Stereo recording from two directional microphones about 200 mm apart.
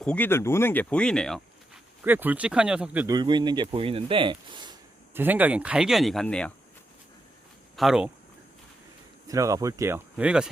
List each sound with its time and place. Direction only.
0.0 s speech: 5° left (ahead or behind)
2.0 s speech: 10° right (ahead or behind)
3.2 s speech: 20° right (ahead or behind)
5.1 s speech: 10° right (ahead or behind)
7.8 s speech: 5° right (ahead or behind)
9.2 s speech: 15° right (ahead or behind)